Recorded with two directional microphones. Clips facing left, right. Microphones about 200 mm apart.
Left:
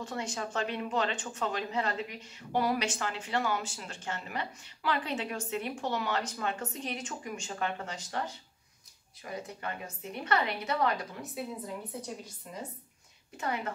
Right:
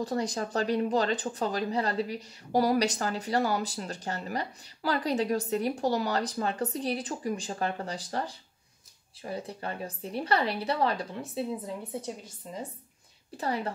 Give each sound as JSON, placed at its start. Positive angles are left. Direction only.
{"t": 0.0, "sound": "speech", "side_deg": -35}
{"t": 9.2, "sound": "speech", "side_deg": -30}